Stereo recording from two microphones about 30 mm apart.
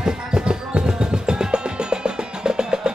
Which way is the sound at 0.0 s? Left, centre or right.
Right.